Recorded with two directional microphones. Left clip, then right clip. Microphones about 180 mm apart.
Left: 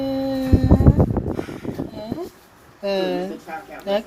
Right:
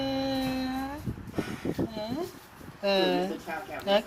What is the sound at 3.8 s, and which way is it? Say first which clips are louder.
Speech: left 3 dB; 40° left (ahead or behind).